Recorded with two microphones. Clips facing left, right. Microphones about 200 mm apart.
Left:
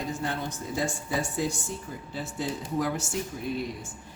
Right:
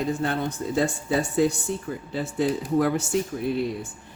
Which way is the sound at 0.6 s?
75° right (ahead or behind).